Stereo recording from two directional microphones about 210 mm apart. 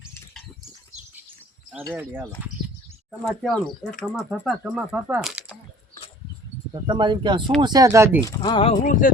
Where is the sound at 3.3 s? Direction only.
Centre (ahead or behind).